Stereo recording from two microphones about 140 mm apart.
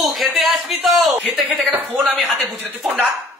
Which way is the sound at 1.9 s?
10° right (ahead or behind).